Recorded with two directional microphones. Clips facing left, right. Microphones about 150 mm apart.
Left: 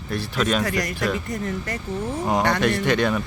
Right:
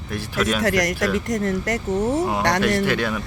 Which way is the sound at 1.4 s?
75° right (ahead or behind).